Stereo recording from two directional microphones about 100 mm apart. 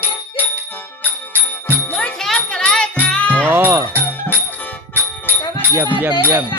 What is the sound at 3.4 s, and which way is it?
Music, 20° right (ahead or behind).